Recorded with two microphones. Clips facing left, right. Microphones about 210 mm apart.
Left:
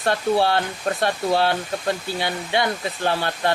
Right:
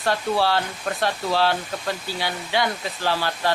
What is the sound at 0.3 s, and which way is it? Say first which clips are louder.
Speech: left 2 dB; 20° left (ahead or behind).